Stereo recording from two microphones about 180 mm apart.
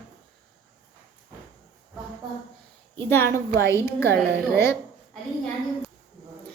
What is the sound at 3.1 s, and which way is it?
A woman's voice, 15° left (ahead or behind).